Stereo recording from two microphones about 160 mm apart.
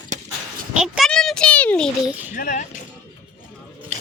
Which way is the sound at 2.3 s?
50° left (ahead or behind).